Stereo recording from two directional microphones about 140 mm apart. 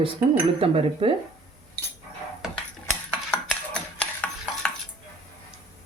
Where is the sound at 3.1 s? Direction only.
5° left (ahead or behind).